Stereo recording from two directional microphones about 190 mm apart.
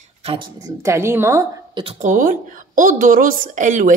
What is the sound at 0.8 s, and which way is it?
Speech, 15° right (ahead or behind).